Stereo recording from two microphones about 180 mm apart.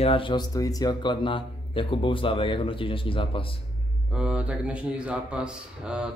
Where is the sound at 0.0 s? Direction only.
30° left (ahead or behind).